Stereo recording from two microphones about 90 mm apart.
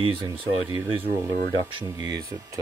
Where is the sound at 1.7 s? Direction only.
55° right (ahead or behind).